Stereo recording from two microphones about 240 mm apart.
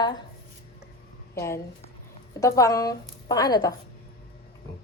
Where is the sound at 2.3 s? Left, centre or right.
Centre.